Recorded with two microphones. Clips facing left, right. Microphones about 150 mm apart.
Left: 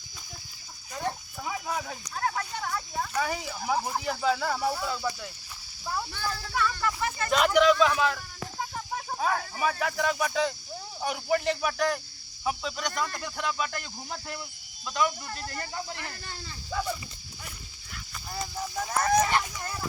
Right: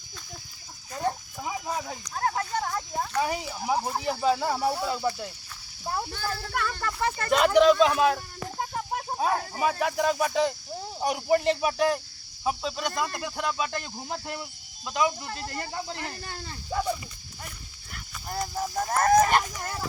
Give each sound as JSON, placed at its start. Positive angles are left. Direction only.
{"t": 1.5, "sound": "a sound", "side_deg": -20}
{"t": 2.1, "sound": "a sound", "side_deg": -35}
{"t": 3.2, "sound": "speech", "side_deg": -20}
{"t": 6.1, "sound": "speech", "side_deg": -40}
{"t": 6.5, "sound": "speech", "side_deg": -55}
{"t": 7.3, "sound": "speech", "side_deg": -35}
{"t": 18.3, "sound": "honk", "side_deg": -50}